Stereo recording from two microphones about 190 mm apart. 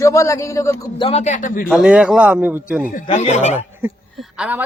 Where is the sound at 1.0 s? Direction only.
30° left (ahead or behind).